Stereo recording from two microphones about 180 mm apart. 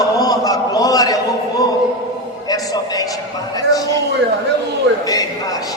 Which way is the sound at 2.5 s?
20° left (ahead or behind).